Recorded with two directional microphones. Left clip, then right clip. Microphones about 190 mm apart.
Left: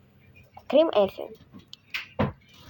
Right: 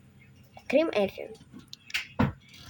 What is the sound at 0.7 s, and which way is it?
Speech, 20° right (ahead or behind).